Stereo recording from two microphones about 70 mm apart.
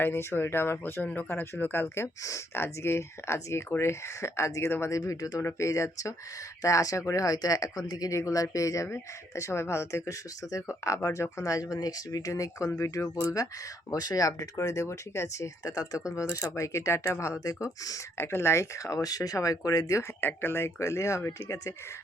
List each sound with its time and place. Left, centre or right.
0.0 s speech: left
5.4 s speech: left
8.1 s speech: left
12.7 s speech: left
13.9 s speech: left
15.6 s speech: left
16.1 s speech: left
17.4 s speech: left
18.2 s speech: left
19.0 s speech: left
20.2 s speech: left